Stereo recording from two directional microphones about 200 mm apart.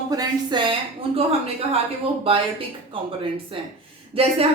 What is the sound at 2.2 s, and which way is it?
Speech, 30° right (ahead or behind).